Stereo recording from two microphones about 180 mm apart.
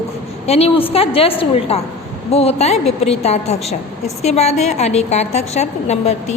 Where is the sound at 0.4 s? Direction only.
35° left (ahead or behind).